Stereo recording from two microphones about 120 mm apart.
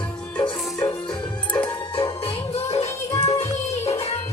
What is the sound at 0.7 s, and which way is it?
Music, 30° left (ahead or behind).